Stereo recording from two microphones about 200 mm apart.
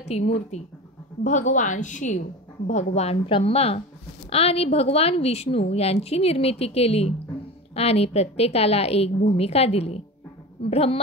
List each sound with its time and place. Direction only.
0.1 s a woman's voice: 35° left (ahead or behind)